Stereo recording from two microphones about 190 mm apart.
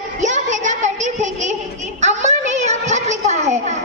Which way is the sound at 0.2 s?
40° right (ahead or behind).